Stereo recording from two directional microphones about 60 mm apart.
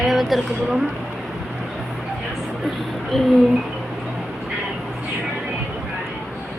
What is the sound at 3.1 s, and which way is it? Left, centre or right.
Speech, centre.